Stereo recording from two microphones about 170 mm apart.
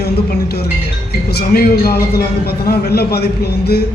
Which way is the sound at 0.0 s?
70° left (ahead or behind).